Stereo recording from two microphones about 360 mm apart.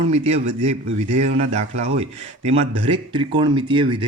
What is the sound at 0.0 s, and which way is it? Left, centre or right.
Speech, centre.